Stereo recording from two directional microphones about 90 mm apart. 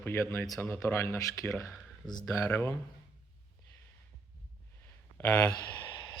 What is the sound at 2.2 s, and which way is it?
Speech, 35° left (ahead or behind).